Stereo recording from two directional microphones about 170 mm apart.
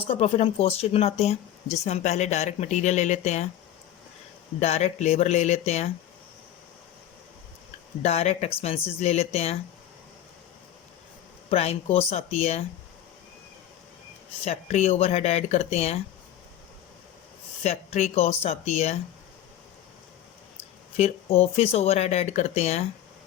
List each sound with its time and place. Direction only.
0.0 s speech: 35° left (ahead or behind)
4.6 s speech: 40° left (ahead or behind)
8.0 s speech: 40° left (ahead or behind)
11.5 s speech: 35° left (ahead or behind)
14.4 s speech: 40° left (ahead or behind)
17.6 s speech: 40° left (ahead or behind)
20.9 s speech: 35° left (ahead or behind)